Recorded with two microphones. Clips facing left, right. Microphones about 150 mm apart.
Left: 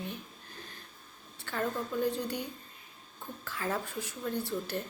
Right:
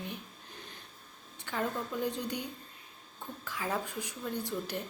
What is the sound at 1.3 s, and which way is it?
Speech, 15° right (ahead or behind).